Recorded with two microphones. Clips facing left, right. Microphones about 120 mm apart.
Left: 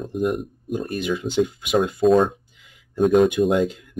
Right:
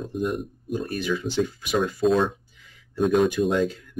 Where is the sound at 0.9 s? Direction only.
20° left (ahead or behind).